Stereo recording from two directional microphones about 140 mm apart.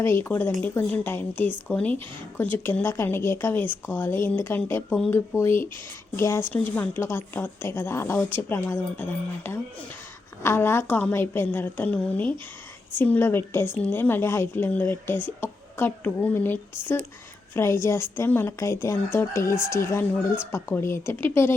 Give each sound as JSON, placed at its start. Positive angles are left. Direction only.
{"t": 0.0, "sound": "a woman's voice", "side_deg": 15}